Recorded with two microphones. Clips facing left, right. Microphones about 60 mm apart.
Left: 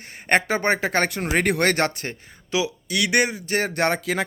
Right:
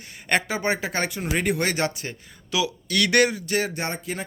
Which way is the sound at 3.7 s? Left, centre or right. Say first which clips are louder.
Left 7 dB; left.